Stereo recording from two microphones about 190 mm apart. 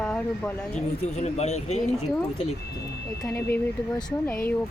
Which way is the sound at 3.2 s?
10° left (ahead or behind).